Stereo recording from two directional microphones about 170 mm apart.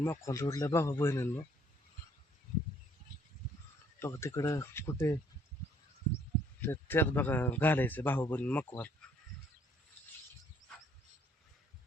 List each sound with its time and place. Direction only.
0.0 s a man's voice: 15° left (ahead or behind)
4.0 s a man's voice: 15° left (ahead or behind)
6.6 s a man's voice: 10° left (ahead or behind)